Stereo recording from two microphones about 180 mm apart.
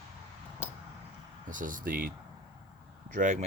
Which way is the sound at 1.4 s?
45° right (ahead or behind).